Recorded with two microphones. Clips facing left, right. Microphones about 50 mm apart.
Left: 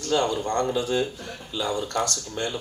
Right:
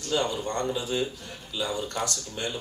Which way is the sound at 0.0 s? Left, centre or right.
Left.